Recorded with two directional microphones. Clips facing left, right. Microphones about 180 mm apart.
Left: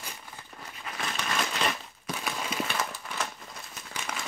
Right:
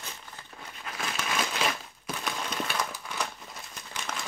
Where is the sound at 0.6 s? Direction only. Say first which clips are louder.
Even; centre (ahead or behind).